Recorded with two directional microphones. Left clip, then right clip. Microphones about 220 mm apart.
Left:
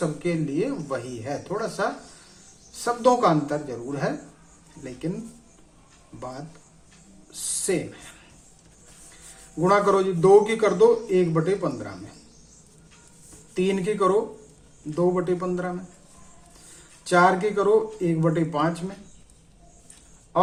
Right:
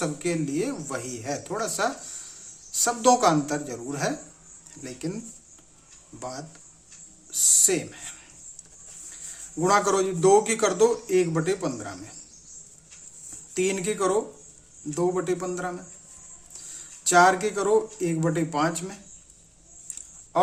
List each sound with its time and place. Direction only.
0.2 s a man's voice: 35° right (ahead or behind)
6.1 s a man's voice: 35° right (ahead or behind)
9.6 s a man's voice: 35° right (ahead or behind)
13.5 s a man's voice: 35° right (ahead or behind)
17.0 s a man's voice: 35° right (ahead or behind)